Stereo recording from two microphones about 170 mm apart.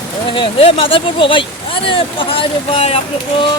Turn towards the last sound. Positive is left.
turn(degrees=35)  # may be behind; listen again after turning